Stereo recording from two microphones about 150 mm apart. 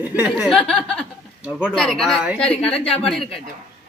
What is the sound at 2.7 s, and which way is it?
Speech, 40° left (ahead or behind).